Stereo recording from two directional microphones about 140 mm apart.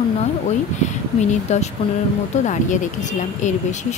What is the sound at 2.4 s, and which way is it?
Speech, 60° left (ahead or behind).